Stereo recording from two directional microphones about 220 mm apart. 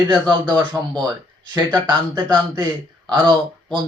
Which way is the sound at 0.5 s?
10° right (ahead or behind).